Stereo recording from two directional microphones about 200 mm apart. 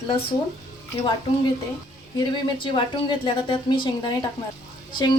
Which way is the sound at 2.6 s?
25° left (ahead or behind).